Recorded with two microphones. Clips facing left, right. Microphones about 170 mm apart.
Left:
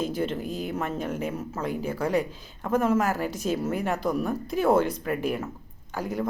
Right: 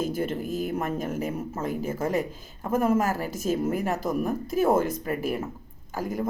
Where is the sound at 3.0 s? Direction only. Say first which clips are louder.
Left 1 dB; 40° right (ahead or behind).